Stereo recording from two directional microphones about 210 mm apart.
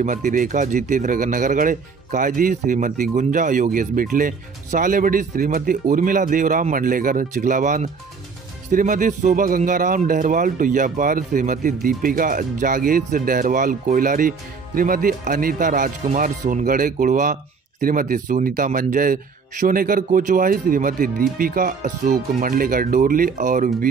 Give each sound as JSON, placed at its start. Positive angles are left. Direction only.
{"t": 0.0, "sound": "speech", "side_deg": -40}